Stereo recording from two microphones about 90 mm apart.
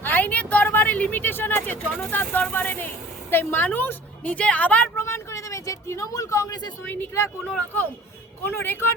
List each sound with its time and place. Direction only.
0.0 s a sound: 20° left (ahead or behind)
4.9 s speech: 30° left (ahead or behind)
6.8 s speech: 20° left (ahead or behind)
8.4 s speech: 25° left (ahead or behind)